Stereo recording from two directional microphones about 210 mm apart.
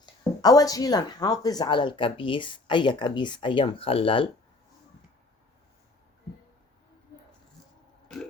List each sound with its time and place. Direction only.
0.0 s speech: 15° left (ahead or behind)